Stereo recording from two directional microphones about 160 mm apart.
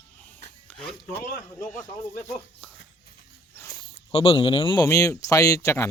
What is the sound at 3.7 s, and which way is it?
Speech, 35° left (ahead or behind).